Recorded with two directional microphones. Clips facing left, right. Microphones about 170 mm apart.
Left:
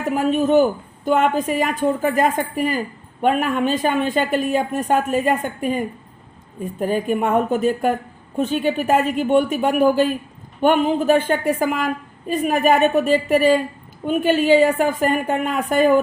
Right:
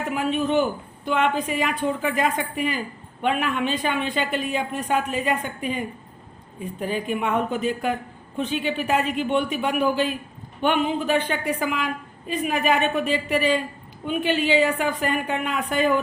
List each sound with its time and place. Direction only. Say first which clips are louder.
0.0 s a woman's voice: left 5 dB; 45° left (ahead or behind)